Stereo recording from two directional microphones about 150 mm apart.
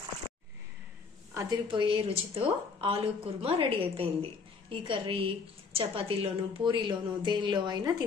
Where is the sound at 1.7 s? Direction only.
35° right (ahead or behind).